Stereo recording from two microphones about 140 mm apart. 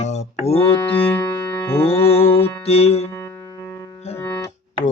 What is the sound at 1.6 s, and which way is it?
Music, 15° left (ahead or behind).